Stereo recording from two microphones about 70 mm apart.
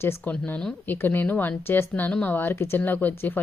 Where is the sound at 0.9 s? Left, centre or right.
Left.